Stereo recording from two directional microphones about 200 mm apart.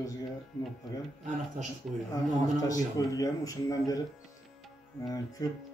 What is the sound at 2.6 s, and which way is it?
Speech, 15° left (ahead or behind).